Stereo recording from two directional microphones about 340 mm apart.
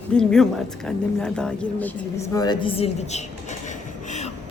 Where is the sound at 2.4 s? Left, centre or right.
Centre.